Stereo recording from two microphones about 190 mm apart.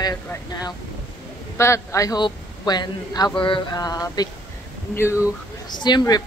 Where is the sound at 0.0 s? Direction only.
20° left (ahead or behind).